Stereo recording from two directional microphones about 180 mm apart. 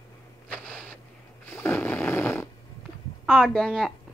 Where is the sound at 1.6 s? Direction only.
10° left (ahead or behind).